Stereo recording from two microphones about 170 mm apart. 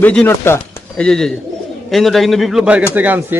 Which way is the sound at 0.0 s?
10° left (ahead or behind).